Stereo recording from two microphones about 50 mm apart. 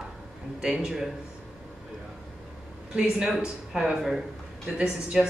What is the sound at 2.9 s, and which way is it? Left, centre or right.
Speech, centre.